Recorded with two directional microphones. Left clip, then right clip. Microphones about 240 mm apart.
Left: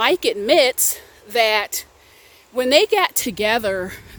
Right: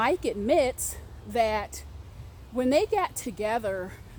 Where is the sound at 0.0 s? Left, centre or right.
Left.